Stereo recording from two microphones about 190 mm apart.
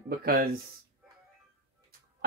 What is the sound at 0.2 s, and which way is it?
Speech, 50° right (ahead or behind).